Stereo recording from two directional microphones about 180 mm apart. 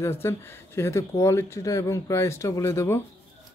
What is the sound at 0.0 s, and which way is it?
Speech, 15° left (ahead or behind).